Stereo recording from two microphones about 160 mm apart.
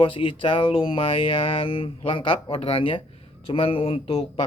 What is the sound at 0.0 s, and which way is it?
Speech, 35° left (ahead or behind).